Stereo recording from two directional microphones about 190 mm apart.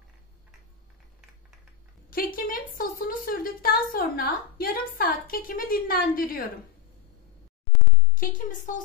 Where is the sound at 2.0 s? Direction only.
50° left (ahead or behind).